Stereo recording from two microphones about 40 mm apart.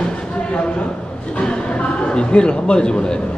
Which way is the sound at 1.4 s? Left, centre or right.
Left.